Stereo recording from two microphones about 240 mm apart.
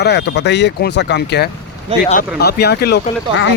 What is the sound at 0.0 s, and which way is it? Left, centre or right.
Speech, left.